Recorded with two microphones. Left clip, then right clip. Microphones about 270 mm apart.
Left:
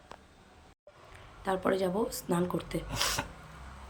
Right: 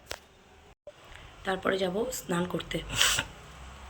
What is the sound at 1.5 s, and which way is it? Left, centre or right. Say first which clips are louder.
Speech: right 1 dB; centre.